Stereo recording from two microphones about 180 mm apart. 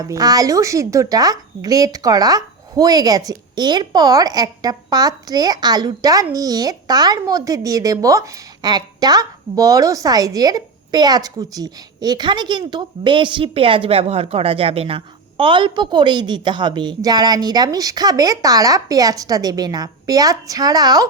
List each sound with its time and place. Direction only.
0.0 s a woman's voice: 20° right (ahead or behind)